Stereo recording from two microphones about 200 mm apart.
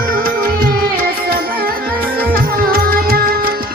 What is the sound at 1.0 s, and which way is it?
Music, 45° right (ahead or behind).